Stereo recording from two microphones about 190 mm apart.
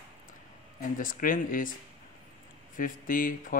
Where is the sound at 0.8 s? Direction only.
45° left (ahead or behind).